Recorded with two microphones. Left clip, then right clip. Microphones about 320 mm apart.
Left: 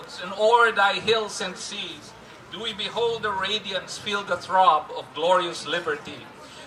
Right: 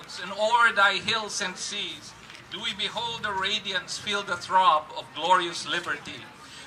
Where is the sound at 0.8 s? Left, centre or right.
Centre.